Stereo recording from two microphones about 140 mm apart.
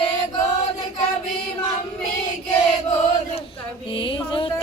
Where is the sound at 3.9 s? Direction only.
35° left (ahead or behind).